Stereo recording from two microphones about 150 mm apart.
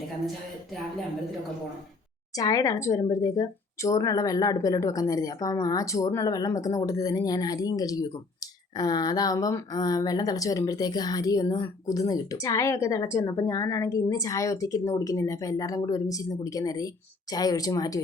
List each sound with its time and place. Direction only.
2.3 s speech: 25° left (ahead or behind)